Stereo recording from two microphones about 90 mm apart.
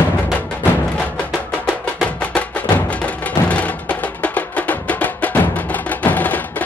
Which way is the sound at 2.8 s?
15° left (ahead or behind).